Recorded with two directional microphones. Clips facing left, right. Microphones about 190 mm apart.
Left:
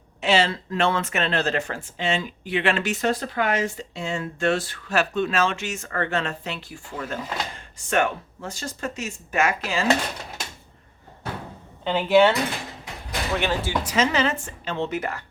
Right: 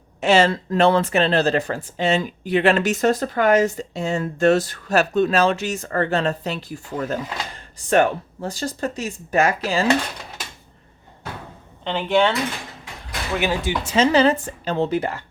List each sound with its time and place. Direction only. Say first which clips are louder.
0.2 s speech: right 5 dB; 45° right (ahead or behind)
11.9 s speech: left 2 dB; 5° left (ahead or behind)
13.3 s speech: right 3 dB; 5° right (ahead or behind)
13.6 s speech: right 2 dB; 20° right (ahead or behind)
13.9 s speech: right 7 dB; 30° right (ahead or behind)